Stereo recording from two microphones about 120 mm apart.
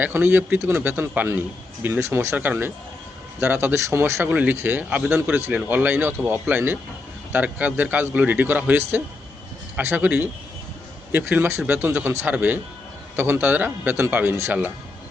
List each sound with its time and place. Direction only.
0.0 s a man's voice: 20° right (ahead or behind)